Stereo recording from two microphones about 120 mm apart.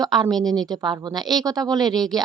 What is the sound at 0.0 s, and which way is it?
Speech, 35° right (ahead or behind).